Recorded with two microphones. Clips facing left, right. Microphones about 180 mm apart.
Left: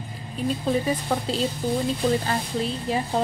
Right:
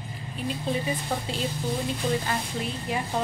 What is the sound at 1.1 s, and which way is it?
Speech, 50° left (ahead or behind).